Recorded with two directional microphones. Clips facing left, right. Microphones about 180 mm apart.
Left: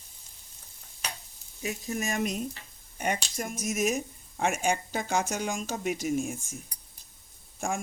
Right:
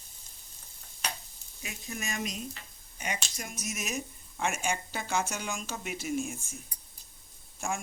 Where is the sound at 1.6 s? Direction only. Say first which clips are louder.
Left 7 dB; 40° left (ahead or behind).